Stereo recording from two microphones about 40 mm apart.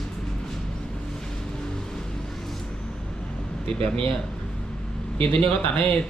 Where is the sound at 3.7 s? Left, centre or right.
Left.